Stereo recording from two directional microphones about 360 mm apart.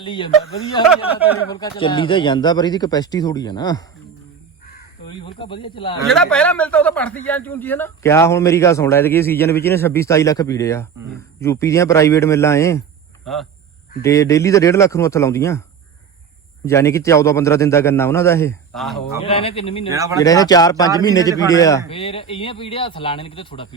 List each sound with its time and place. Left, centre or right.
0.0 s speech: centre
1.5 s speech: centre
5.0 s speech: centre
6.1 s a man's voice: centre
16.6 s speech: centre
19.2 s speech: centre
19.9 s speech: centre
20.2 s speech: centre